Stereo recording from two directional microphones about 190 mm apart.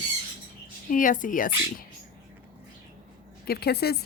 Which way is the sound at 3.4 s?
55° left (ahead or behind).